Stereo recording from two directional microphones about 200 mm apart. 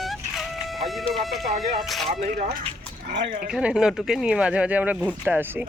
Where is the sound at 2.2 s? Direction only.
45° right (ahead or behind).